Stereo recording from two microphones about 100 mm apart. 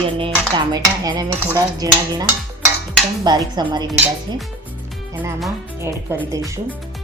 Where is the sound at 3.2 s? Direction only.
45° right (ahead or behind).